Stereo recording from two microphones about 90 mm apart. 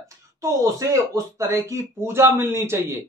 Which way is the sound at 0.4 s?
35° right (ahead or behind).